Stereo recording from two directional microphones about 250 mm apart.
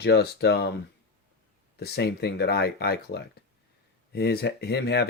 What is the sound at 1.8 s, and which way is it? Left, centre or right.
Speech, left.